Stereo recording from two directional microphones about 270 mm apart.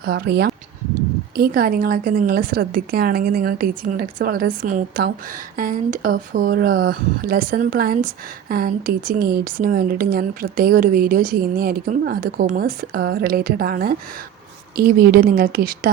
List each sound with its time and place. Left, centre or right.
0.0 s a woman's voice: right